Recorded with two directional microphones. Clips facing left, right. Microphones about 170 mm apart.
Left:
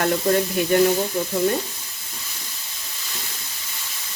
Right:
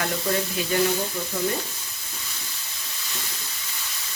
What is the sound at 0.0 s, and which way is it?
Speech, 50° left (ahead or behind).